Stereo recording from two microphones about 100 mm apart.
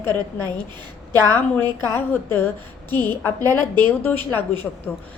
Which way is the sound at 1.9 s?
20° left (ahead or behind).